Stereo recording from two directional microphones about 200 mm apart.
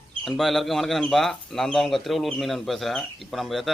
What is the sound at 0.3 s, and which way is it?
Speech, centre (ahead or behind).